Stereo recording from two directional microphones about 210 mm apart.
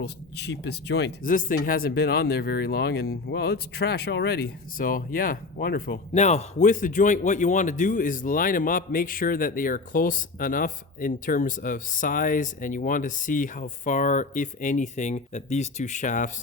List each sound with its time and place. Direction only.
0.0 s speech: 55° left (ahead or behind); by 16.3 s 35° left (ahead or behind)